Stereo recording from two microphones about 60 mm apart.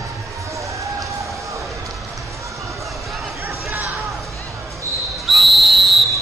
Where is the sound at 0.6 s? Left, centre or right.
Right.